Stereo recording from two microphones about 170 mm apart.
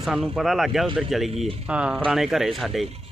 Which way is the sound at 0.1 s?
Centre (ahead or behind).